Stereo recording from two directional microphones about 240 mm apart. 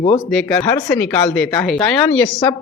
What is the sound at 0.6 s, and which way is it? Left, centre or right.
Speech, centre.